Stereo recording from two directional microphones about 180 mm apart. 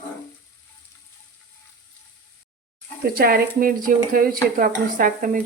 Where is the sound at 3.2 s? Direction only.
55° right (ahead or behind).